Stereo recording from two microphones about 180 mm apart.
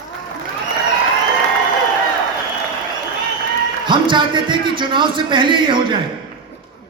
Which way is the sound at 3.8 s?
25° right (ahead or behind).